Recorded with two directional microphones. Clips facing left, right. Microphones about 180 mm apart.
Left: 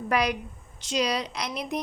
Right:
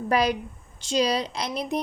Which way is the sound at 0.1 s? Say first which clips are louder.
Right 3 dB; 30° right (ahead or behind).